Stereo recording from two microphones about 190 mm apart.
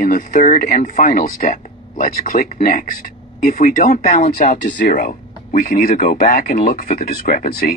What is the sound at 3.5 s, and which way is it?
Speech, 45° left (ahead or behind).